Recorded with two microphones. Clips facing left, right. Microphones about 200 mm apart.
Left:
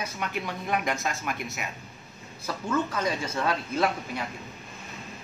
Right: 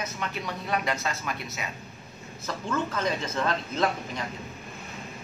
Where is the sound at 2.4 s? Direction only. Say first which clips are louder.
Left 2 dB; 10° left (ahead or behind).